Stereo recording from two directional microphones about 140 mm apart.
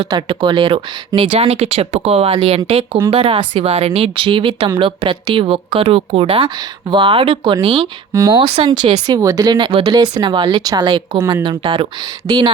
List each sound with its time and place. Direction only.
0.0 s speech: 35° right (ahead or behind)
8.1 s speech: 20° right (ahead or behind)
8.4 s speech: 35° right (ahead or behind)
11.2 s speech: 20° right (ahead or behind)
11.4 s speech: 35° right (ahead or behind)